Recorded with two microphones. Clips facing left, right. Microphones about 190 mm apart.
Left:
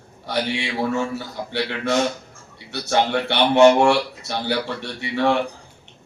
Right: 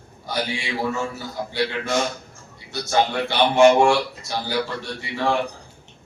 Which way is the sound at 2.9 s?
65° left (ahead or behind).